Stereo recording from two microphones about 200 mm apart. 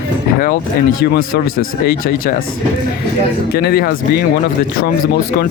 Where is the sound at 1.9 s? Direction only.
45° left (ahead or behind).